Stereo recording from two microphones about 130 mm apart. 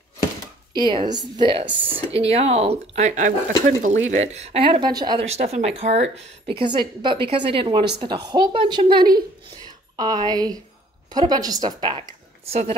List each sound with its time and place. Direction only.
0.7 s a woman's voice: 35° right (ahead or behind)
5.3 s a woman's voice: 60° right (ahead or behind); by 12.0 s 30° right (ahead or behind)
12.4 s a woman's voice: 60° right (ahead or behind)